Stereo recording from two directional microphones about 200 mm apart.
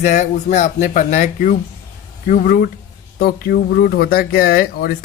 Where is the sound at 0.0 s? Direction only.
35° left (ahead or behind).